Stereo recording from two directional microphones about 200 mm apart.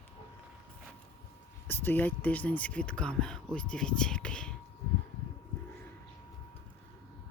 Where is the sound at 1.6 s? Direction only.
10° left (ahead or behind).